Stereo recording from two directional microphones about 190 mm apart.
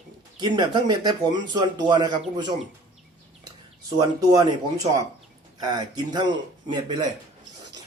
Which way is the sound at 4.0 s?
20° right (ahead or behind).